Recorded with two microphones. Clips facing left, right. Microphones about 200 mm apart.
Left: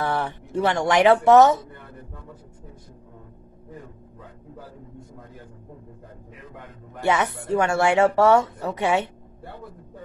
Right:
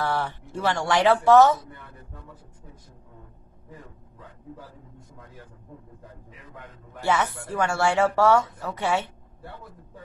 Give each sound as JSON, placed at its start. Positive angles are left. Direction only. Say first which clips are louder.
{"t": 0.0, "sound": "speech", "louder": "left 2 dB", "side_deg": 15}
{"t": 7.0, "sound": "speech", "louder": "left 2 dB", "side_deg": 20}